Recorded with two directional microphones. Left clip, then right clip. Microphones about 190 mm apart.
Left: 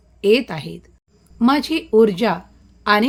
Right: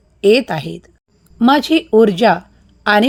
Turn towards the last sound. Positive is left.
turn(degrees=-30)  # may be behind; listen again after turning